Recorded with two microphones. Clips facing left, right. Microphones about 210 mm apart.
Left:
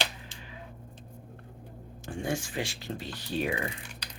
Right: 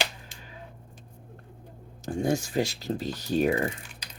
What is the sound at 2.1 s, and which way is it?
Speech, 40° right (ahead or behind).